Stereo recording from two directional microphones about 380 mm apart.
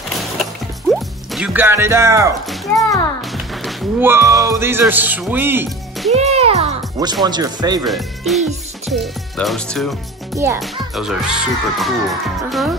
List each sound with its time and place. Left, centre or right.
0.8 s speech: centre
6.1 s music: centre
7.2 s speech: centre